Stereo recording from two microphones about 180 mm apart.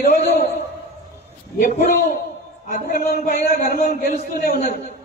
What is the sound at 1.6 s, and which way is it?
A man's voice, 45° left (ahead or behind).